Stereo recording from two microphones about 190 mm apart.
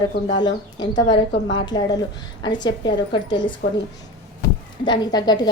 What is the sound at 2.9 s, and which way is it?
Speech, 65° left (ahead or behind).